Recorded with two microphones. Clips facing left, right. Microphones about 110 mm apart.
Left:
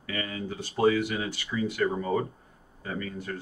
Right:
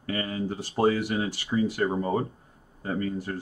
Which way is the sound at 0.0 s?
35° right (ahead or behind).